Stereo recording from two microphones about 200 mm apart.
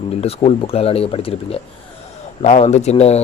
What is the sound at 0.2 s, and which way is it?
Speech, 30° left (ahead or behind).